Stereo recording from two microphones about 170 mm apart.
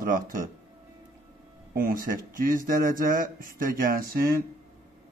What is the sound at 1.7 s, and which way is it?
Speech, 55° right (ahead or behind).